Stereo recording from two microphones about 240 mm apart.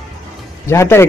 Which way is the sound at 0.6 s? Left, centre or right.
Centre.